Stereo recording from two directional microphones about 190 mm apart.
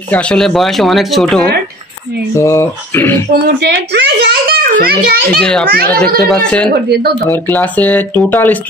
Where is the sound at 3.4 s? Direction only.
60° right (ahead or behind).